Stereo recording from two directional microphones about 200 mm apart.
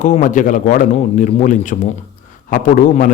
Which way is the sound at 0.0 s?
40° left (ahead or behind).